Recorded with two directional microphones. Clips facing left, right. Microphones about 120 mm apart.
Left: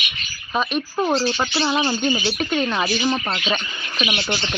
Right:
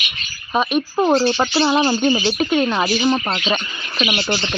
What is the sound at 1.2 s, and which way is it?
Speech, 25° right (ahead or behind).